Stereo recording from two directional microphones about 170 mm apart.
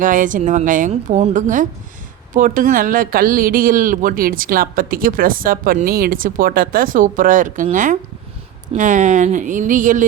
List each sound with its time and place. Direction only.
0.0 s speech: 50° right (ahead or behind)